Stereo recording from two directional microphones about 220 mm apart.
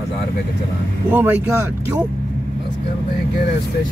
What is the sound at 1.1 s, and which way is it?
Speech, 10° right (ahead or behind).